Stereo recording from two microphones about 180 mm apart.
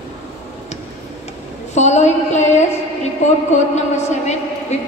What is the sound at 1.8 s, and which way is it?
Speech, 40° left (ahead or behind).